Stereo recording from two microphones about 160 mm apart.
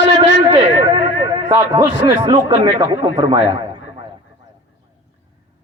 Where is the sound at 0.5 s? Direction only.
30° right (ahead or behind).